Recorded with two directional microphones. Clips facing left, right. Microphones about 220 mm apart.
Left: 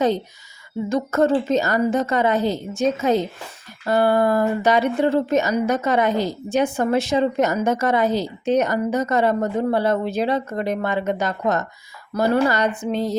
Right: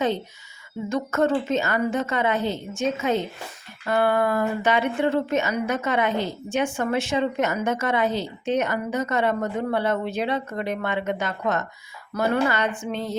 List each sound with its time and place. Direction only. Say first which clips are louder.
0.9 s speech: left 4 dB; 35° left (ahead or behind)